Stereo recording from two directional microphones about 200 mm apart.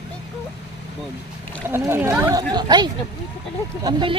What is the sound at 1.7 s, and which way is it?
Speech, 10° right (ahead or behind).